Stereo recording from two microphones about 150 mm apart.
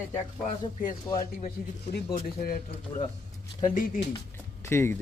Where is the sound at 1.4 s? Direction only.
75° left (ahead or behind).